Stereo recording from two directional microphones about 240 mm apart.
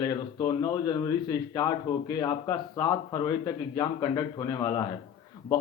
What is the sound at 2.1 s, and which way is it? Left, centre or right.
Speech, centre.